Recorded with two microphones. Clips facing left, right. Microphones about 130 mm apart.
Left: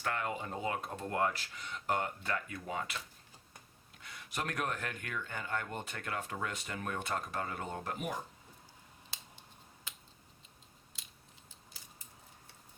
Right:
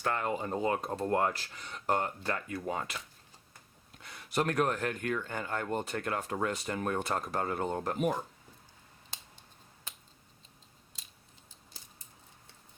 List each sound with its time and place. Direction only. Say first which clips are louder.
0.0 s speech: right 5 dB; 35° right (ahead or behind)
4.4 s speech: right 8 dB; 40° right (ahead or behind)